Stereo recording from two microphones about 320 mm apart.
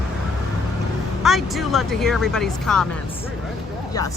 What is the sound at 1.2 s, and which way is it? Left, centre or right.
Speech, centre.